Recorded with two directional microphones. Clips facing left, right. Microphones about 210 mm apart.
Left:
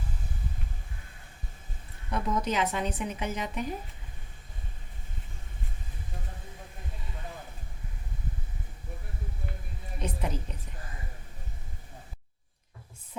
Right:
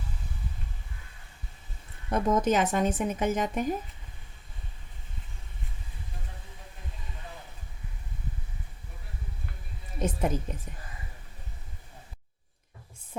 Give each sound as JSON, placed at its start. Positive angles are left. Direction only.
{"t": 2.0, "sound": "speech", "side_deg": -45}
{"t": 10.0, "sound": "a woman's voice", "side_deg": -45}